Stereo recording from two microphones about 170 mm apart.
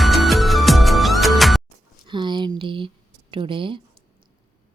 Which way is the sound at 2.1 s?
25° right (ahead or behind).